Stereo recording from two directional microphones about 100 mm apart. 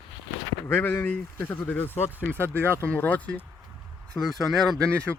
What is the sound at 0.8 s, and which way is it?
Speech, 15° left (ahead or behind).